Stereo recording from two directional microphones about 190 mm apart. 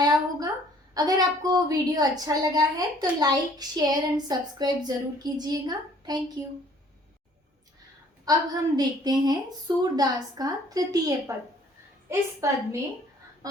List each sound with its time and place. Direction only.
0.0 s a sound: 20° right (ahead or behind)
0.9 s a woman's voice: 20° right (ahead or behind)
8.2 s a woman's voice: 20° right (ahead or behind)